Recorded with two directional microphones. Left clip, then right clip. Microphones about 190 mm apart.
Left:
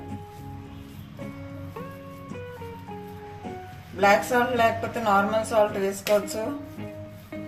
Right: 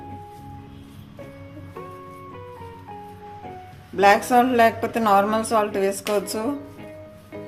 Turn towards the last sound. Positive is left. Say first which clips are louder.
# even
turn(degrees=-65)  # may be behind; listen again after turning